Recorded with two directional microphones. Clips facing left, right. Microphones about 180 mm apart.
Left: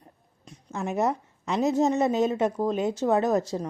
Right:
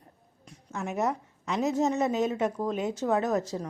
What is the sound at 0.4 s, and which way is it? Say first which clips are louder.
Speech: left 3 dB; 30° left (ahead or behind).